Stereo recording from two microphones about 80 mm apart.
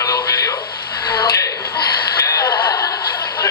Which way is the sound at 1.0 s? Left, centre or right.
Left.